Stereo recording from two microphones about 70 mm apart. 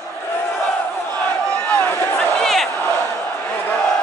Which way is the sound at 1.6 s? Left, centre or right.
Left.